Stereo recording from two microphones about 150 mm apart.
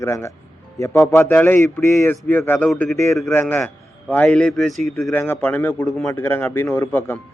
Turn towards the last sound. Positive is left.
turn(degrees=15)  # may be behind; listen again after turning